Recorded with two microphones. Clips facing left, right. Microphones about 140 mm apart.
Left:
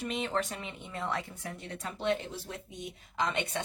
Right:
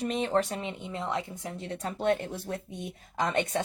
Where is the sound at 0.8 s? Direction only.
20° right (ahead or behind).